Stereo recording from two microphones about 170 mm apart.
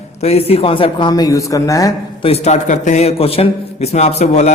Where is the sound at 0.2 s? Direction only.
35° left (ahead or behind); by 1.9 s 20° left (ahead or behind).